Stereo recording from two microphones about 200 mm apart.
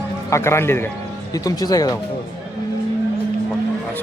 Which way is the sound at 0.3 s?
15° left (ahead or behind).